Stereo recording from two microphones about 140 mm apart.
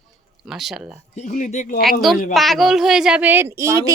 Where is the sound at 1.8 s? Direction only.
Centre (ahead or behind).